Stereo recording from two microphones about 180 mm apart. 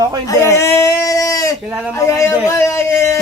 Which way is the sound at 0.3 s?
15° left (ahead or behind).